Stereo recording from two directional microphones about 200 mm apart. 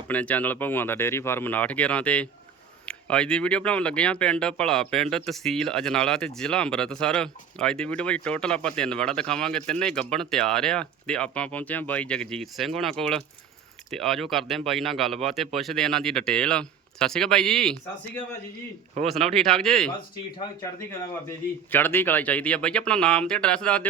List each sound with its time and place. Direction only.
0.1 s speech: 5° left (ahead or behind)
19.0 s speech: 30° right (ahead or behind)
19.4 s speech: centre (ahead or behind)
21.2 s speech: 10° left (ahead or behind)